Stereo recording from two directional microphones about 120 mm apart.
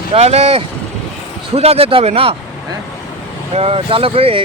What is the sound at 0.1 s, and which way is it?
Speech, 60° right (ahead or behind).